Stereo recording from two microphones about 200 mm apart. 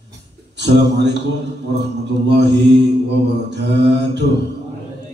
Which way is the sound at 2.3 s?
60° right (ahead or behind).